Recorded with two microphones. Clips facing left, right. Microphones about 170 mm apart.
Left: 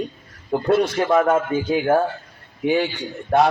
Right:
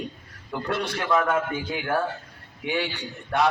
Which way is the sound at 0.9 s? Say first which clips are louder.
Left 6 dB; 45° left (ahead or behind).